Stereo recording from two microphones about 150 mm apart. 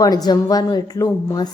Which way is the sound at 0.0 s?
25° left (ahead or behind).